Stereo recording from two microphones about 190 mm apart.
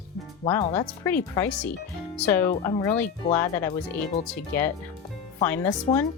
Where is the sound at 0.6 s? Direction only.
30° left (ahead or behind).